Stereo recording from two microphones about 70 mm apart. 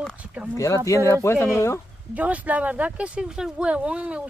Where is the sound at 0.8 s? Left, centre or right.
Left.